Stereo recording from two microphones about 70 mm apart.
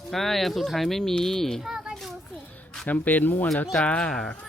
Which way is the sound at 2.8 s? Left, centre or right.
Left.